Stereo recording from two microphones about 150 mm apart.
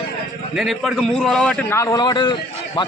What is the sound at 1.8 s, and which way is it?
A man's voice, 25° left (ahead or behind).